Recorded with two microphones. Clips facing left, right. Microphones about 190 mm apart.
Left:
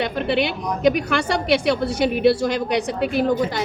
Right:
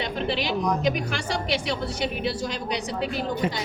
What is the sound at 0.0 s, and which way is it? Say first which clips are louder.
A woman's voice: left 6 dB; 60° left (ahead or behind).